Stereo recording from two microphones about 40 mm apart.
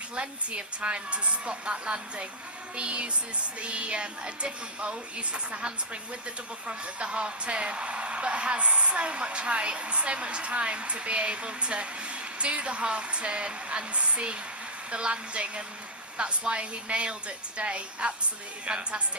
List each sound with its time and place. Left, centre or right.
0.2 s a woman's voice: right